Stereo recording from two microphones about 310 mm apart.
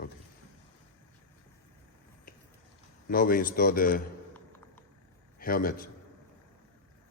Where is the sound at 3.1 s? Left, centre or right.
Left.